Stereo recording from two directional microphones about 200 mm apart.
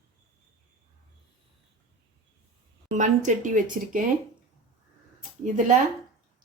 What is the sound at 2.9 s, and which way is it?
Speech, 40° right (ahead or behind).